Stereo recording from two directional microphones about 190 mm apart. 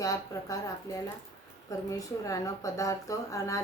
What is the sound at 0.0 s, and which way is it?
Speech, 15° left (ahead or behind).